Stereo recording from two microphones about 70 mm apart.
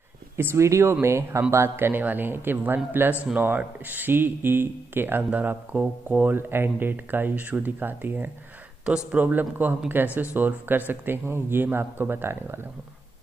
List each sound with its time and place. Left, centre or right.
0.4 s speech: right
8.8 s speech: centre
9.2 s speech: right